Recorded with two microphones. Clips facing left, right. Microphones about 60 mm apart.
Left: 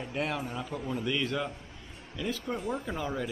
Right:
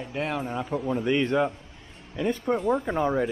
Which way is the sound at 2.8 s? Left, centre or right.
Right.